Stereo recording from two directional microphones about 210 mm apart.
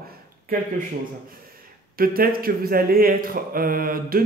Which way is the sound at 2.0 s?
45° right (ahead or behind).